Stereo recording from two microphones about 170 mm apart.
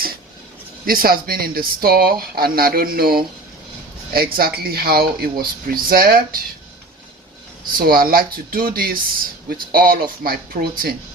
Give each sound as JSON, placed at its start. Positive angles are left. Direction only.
{"t": 0.9, "sound": "speech", "side_deg": -60}
{"t": 7.8, "sound": "speech", "side_deg": -60}